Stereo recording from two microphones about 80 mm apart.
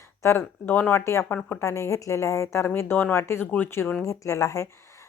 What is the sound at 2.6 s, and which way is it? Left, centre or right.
Speech, left.